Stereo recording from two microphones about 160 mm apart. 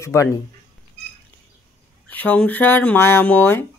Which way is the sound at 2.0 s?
10° left (ahead or behind).